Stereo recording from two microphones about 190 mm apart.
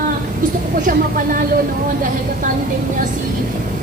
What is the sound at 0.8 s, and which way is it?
Speech, 45° right (ahead or behind).